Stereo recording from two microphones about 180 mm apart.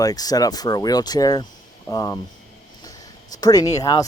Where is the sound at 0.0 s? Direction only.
20° left (ahead or behind).